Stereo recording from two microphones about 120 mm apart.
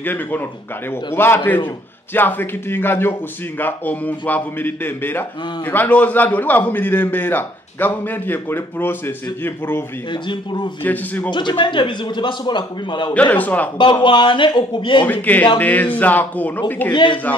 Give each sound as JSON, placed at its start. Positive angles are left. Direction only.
{"t": 0.0, "sound": "a man's voice", "side_deg": 15}
{"t": 10.1, "sound": "speech", "side_deg": 40}
{"t": 10.8, "sound": "a man's voice", "side_deg": 15}
{"t": 11.2, "sound": "speech", "side_deg": 40}
{"t": 13.1, "sound": "a man's voice", "side_deg": 15}
{"t": 14.0, "sound": "speech", "side_deg": 40}
{"t": 15.0, "sound": "a man's voice", "side_deg": 15}
{"t": 16.9, "sound": "speech", "side_deg": 40}